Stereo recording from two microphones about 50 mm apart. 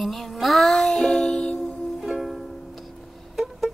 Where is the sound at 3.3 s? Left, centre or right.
Centre.